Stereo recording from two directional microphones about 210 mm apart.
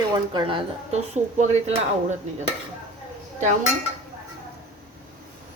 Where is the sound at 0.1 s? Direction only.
20° right (ahead or behind).